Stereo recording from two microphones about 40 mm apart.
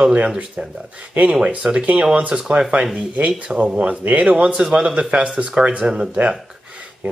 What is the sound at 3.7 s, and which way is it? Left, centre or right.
Speech, right.